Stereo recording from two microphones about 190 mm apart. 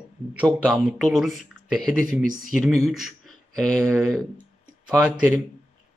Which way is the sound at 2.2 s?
45° right (ahead or behind).